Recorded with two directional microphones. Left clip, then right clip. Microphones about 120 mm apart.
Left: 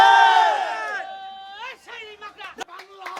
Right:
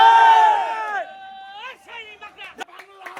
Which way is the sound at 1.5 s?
35° left (ahead or behind).